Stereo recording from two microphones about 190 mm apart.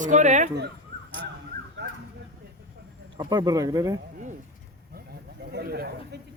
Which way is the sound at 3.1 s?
20° right (ahead or behind).